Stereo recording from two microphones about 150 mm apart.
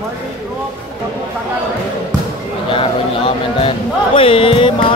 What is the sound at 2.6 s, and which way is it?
Speech, 35° left (ahead or behind).